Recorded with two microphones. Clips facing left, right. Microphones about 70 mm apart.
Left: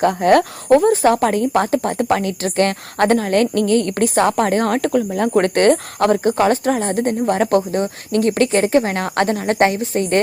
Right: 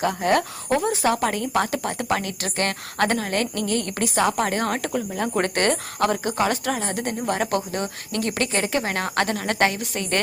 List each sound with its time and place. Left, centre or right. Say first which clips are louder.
0.0 s speech: left 8 dB; left